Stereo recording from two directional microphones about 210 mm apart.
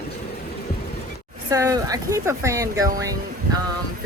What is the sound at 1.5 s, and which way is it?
Speech, 15° right (ahead or behind).